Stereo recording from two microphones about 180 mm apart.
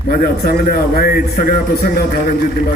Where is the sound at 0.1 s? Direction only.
55° left (ahead or behind).